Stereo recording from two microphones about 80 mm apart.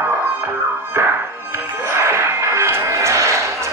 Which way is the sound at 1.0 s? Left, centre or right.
Right.